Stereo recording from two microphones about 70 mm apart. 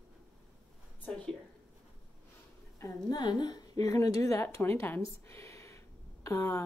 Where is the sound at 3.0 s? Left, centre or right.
Left.